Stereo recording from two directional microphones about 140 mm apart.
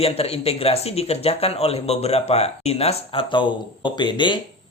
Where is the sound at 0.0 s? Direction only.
45° left (ahead or behind).